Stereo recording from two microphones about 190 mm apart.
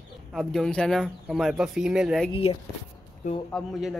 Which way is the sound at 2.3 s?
25° left (ahead or behind).